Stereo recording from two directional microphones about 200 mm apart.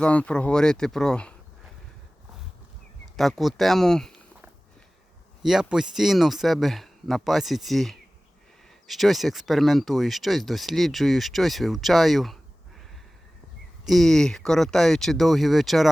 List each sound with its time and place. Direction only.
0.0 s speech: 5° left (ahead or behind)
3.2 s speech: centre (ahead or behind)
13.8 s speech: centre (ahead or behind)